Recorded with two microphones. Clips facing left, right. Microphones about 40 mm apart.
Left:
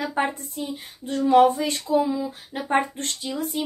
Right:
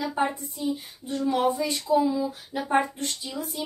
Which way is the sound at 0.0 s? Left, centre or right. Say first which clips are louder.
Left 1 dB; left.